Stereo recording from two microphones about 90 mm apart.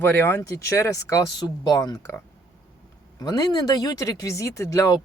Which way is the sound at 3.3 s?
45° left (ahead or behind).